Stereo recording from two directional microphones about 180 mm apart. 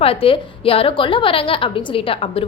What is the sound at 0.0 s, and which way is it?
A woman's voice, 30° left (ahead or behind).